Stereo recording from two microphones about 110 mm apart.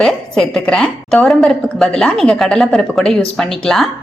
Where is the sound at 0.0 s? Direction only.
5° left (ahead or behind).